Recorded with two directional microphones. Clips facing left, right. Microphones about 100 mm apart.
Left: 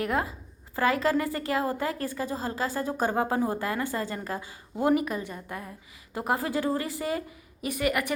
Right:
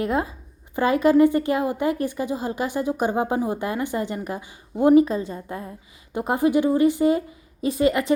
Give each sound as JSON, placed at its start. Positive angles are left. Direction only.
{"t": 0.0, "sound": "a woman's voice", "side_deg": -20}